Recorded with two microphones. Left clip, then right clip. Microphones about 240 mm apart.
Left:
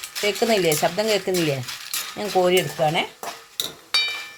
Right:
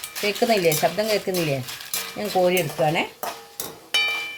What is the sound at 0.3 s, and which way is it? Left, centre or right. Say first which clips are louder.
Speech: right 1 dB; left.